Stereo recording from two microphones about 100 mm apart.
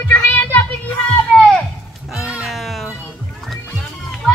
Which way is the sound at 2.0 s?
5° right (ahead or behind).